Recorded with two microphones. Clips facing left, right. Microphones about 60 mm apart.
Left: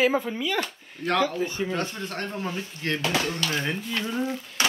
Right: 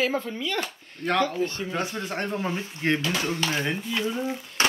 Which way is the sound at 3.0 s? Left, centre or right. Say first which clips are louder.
Left 2 dB; left.